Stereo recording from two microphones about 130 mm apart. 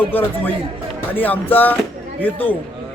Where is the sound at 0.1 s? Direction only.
15° left (ahead or behind).